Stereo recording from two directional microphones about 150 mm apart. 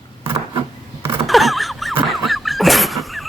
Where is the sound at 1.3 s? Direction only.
Centre (ahead or behind).